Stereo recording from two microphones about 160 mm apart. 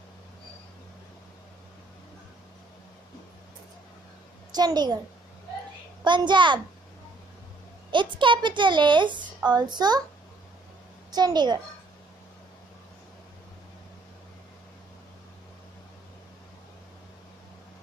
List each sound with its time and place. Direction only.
4.6 s a woman's voice: 25° right (ahead or behind)
6.0 s a child's voice: 30° right (ahead or behind)
7.9 s a woman's voice: 30° right (ahead or behind)
11.1 s a woman's voice: 25° right (ahead or behind)